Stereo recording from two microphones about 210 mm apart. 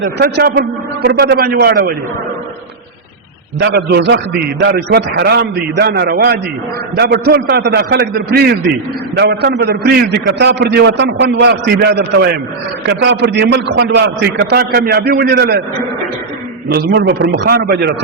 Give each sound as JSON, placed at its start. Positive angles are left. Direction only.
{"t": 0.2, "sound": "a man's voice", "side_deg": -50}
{"t": 3.6, "sound": "a man's voice", "side_deg": -50}
{"t": 16.6, "sound": "a man's voice", "side_deg": -50}